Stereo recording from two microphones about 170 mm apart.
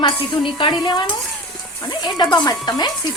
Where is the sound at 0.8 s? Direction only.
25° left (ahead or behind).